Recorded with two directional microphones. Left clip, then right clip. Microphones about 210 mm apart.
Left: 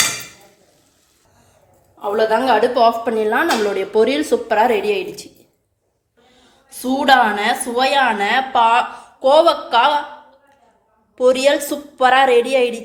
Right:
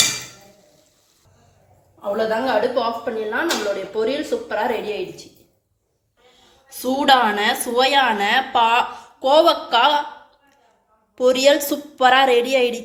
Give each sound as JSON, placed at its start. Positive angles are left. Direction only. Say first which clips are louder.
{"t": 2.0, "sound": "a woman's voice", "louder": "left 5 dB", "side_deg": 55}
{"t": 6.7, "sound": "a woman's voice", "louder": "left 2 dB", "side_deg": 5}
{"t": 11.1, "sound": "a woman's voice", "louder": "left 1 dB", "side_deg": 5}